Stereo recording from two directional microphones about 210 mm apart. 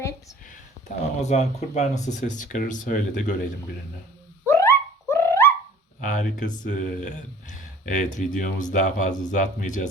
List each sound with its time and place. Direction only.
1.2 s speech: 30° left (ahead or behind)
4.4 s a sound: 10° left (ahead or behind)
6.0 s speech: 35° left (ahead or behind)